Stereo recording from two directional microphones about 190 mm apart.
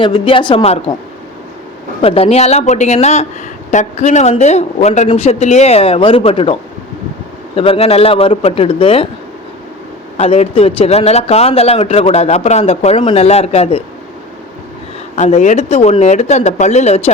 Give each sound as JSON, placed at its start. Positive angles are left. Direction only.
{"t": 0.0, "sound": "a woman's voice", "side_deg": 25}
{"t": 2.0, "sound": "a man's voice", "side_deg": 30}
{"t": 10.2, "sound": "a man's voice", "side_deg": 30}
{"t": 15.1, "sound": "a man's voice", "side_deg": 35}